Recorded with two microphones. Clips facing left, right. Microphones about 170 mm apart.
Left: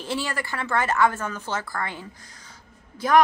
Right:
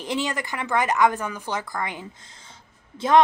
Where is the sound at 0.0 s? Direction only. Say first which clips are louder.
Right 2 dB; 20° right (ahead or behind).